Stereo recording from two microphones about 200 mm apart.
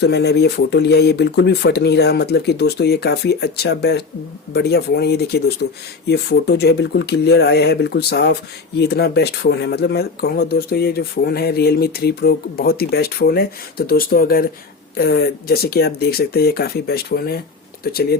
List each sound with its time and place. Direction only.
0.0 s speech: 55° left (ahead or behind)